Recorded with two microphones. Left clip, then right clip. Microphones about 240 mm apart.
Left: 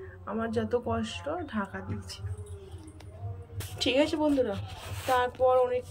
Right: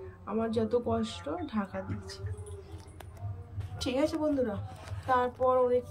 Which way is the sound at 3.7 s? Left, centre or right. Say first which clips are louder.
Left 4 dB; centre.